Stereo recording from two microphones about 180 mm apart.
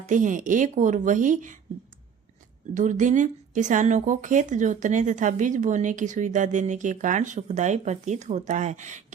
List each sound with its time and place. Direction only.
0.1 s speech: 45° right (ahead or behind)
2.7 s speech: 45° right (ahead or behind)